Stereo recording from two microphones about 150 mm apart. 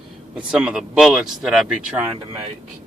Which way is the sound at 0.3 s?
5° right (ahead or behind).